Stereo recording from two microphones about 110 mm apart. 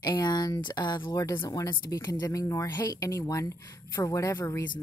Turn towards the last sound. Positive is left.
turn(degrees=30)  # may be behind; listen again after turning